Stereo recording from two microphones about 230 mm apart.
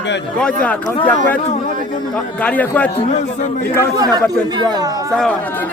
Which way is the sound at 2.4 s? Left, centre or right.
Centre.